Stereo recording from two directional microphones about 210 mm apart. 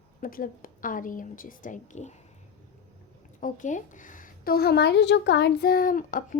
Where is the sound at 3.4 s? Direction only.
35° left (ahead or behind).